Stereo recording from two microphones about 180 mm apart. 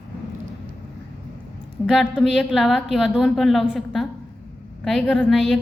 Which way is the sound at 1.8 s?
Centre (ahead or behind).